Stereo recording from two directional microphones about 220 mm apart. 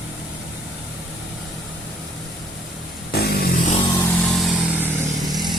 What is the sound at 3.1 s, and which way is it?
Vehicle, 45° left (ahead or behind).